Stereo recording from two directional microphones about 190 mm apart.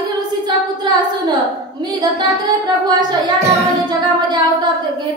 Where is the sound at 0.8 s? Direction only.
20° right (ahead or behind).